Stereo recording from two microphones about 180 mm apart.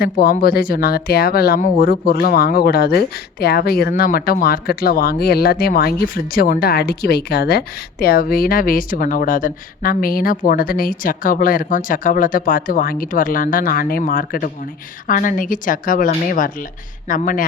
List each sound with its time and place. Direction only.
0.0 s speech: 55° left (ahead or behind)